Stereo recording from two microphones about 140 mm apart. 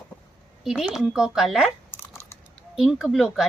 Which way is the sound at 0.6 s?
Centre (ahead or behind).